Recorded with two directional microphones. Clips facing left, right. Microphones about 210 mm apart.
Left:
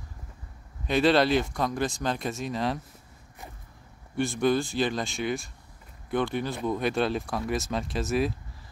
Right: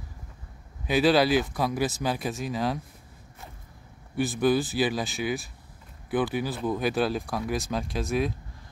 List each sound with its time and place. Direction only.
0.8 s speech: 5° right (ahead or behind)
4.2 s speech: 5° right (ahead or behind)